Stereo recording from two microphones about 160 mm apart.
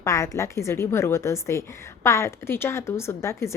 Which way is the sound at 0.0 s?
20° left (ahead or behind).